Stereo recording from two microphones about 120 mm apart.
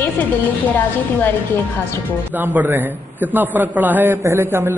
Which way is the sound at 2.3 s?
15° right (ahead or behind).